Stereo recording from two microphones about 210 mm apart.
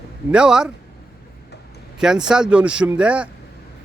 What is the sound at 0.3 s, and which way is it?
Speech, 5° right (ahead or behind).